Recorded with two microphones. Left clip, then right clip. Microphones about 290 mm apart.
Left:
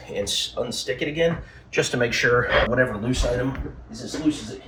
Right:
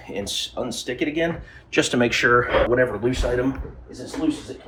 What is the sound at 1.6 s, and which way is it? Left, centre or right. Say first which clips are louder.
Speech: right 2 dB; right.